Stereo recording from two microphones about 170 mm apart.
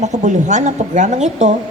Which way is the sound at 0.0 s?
45° right (ahead or behind).